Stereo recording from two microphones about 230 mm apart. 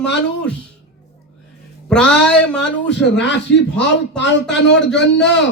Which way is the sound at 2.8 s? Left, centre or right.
Left.